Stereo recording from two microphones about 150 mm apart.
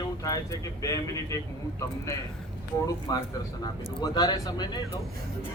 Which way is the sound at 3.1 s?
25° left (ahead or behind).